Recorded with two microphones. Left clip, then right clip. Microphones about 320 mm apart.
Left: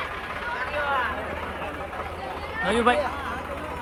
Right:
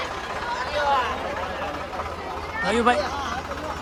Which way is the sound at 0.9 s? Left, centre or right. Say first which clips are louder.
Right 4 dB; right.